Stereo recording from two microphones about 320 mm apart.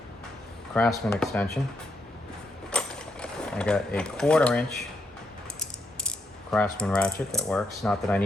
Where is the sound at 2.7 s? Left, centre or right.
Centre.